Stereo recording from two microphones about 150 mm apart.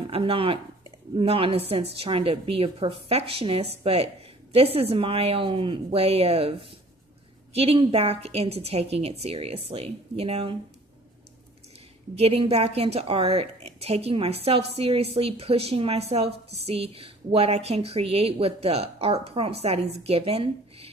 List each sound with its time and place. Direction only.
0.0 s speech: 40° right (ahead or behind)
7.5 s a woman's voice: 40° right (ahead or behind)
12.2 s a woman's voice: 40° right (ahead or behind)